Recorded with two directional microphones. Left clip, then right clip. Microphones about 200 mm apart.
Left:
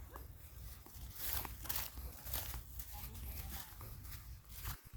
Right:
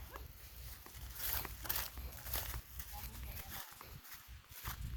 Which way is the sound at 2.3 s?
20° right (ahead or behind).